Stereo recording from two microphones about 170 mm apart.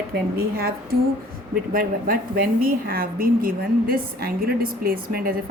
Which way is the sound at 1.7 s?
60° right (ahead or behind).